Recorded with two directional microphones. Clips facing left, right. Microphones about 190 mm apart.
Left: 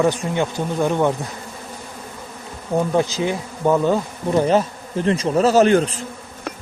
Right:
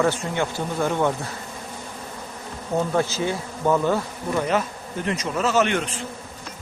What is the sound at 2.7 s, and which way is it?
Speech, 15° left (ahead or behind).